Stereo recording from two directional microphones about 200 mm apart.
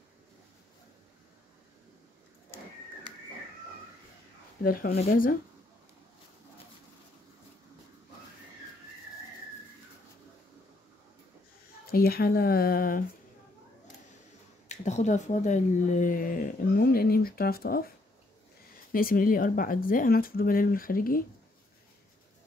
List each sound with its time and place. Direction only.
4.6 s speech: 45° left (ahead or behind)
11.9 s speech: 50° left (ahead or behind)
14.7 s speech: 35° left (ahead or behind)